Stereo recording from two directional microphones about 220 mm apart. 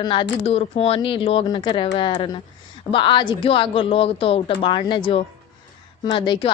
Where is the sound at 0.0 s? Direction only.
20° left (ahead or behind).